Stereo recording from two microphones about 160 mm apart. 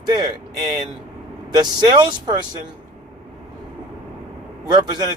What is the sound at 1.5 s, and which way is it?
Speech, 25° right (ahead or behind).